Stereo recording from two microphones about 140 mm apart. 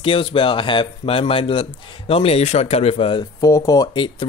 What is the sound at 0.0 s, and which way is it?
A man's voice, 35° left (ahead or behind).